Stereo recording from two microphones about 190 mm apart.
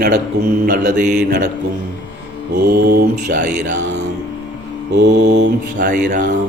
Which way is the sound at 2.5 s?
55° right (ahead or behind).